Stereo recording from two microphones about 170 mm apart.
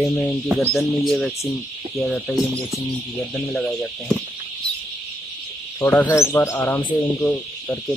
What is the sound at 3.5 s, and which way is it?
Speech, centre (ahead or behind).